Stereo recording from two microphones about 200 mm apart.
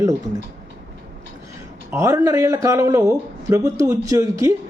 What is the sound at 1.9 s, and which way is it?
Speech, 15° right (ahead or behind).